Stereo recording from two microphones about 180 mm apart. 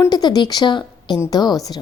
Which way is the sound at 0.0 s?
20° left (ahead or behind).